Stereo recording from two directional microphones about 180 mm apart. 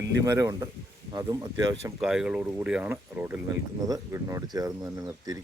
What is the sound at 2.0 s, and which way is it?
Speech, 5° right (ahead or behind).